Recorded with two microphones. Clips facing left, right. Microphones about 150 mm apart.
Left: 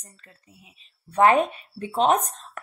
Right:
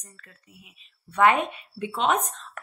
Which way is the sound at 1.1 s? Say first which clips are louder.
Left 3 dB; 35° left (ahead or behind).